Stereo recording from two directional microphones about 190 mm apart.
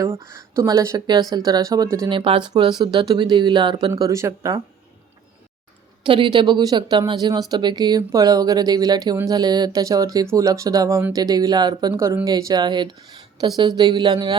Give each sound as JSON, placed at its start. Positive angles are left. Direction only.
{"t": 0.2, "sound": "speech", "side_deg": -15}
{"t": 6.0, "sound": "speech", "side_deg": -25}